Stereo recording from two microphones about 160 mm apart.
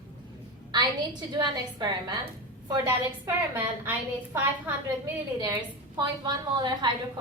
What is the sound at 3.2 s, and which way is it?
Speech, 10° right (ahead or behind).